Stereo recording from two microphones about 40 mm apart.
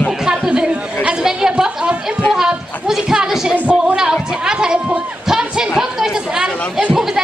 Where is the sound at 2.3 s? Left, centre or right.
Centre.